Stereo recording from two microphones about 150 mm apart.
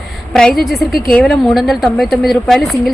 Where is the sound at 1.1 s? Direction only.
Centre (ahead or behind).